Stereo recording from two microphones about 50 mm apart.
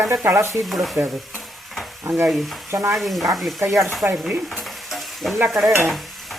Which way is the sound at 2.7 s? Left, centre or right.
Right.